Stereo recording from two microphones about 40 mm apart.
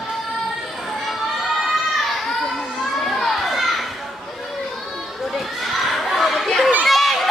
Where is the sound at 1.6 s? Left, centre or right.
Centre.